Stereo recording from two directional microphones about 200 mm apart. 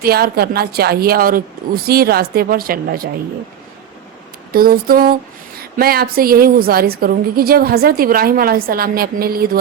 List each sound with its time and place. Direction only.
0.0 s a woman's voice: 50° right (ahead or behind)
4.5 s a woman's voice: 45° right (ahead or behind)